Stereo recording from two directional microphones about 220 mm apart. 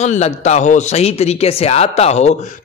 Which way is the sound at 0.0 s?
30° left (ahead or behind).